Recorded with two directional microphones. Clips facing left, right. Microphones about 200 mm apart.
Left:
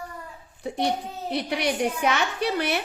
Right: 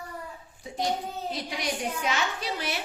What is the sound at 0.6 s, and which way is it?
A child's voice, 65° left (ahead or behind).